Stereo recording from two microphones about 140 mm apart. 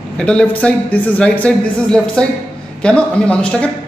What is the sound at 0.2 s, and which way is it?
Speech, 5° left (ahead or behind).